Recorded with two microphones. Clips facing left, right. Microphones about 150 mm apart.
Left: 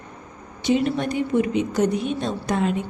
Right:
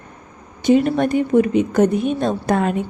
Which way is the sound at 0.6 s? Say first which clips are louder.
Right 6 dB; 50° right (ahead or behind).